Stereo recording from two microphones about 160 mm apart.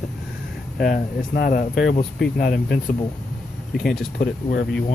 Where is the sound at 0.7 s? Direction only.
60° left (ahead or behind).